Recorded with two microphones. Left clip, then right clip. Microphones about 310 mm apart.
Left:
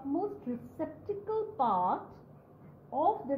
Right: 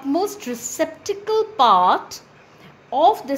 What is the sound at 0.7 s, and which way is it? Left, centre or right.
A woman's voice, right.